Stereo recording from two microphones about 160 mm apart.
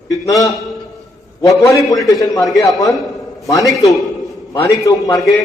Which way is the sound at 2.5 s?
20° left (ahead or behind).